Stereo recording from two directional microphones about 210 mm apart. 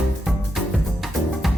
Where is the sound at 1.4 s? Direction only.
Centre (ahead or behind).